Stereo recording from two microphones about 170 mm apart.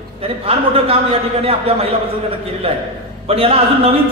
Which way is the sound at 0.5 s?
35° right (ahead or behind).